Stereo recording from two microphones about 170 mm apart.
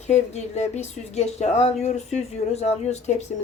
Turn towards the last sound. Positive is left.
turn(degrees=40)  # may be behind; listen again after turning